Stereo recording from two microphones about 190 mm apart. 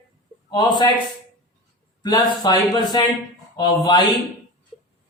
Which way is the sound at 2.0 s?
20° left (ahead or behind).